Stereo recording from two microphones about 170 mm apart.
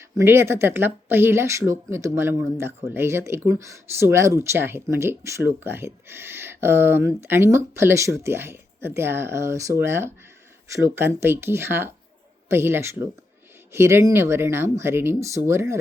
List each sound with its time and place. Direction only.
0.2 s speech: 15° right (ahead or behind)